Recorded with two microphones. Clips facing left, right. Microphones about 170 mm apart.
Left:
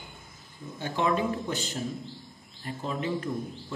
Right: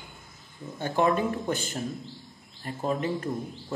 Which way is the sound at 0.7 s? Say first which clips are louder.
Right 3 dB; 50° right (ahead or behind).